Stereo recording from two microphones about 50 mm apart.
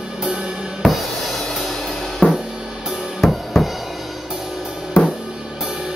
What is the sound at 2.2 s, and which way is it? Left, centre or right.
Drum kit, left.